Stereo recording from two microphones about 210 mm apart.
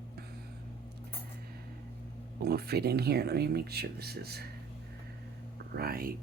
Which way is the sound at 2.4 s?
50° right (ahead or behind).